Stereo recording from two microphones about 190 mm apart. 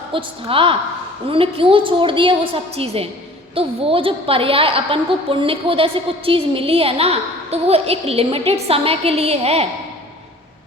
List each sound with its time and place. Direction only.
0.1 s a woman's voice: 30° right (ahead or behind)